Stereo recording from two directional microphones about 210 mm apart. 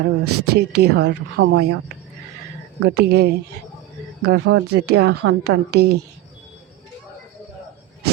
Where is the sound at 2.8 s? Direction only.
50° right (ahead or behind).